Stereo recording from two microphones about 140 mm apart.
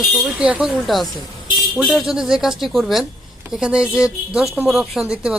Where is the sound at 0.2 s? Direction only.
5° right (ahead or behind).